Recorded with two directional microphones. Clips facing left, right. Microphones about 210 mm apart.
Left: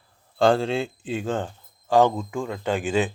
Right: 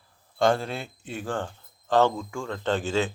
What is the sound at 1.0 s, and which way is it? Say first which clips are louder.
Speech: left 7 dB; 90° left.